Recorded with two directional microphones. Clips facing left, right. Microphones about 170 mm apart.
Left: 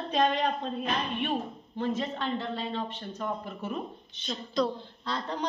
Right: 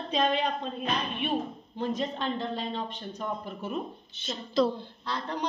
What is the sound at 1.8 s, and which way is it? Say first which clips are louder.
Speech: even; 15° right (ahead or behind).